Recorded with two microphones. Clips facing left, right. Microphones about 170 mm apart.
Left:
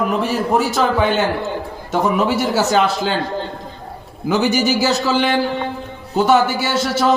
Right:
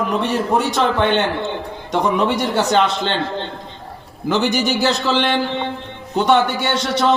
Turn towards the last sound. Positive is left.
turn(degrees=5)  # may be behind; listen again after turning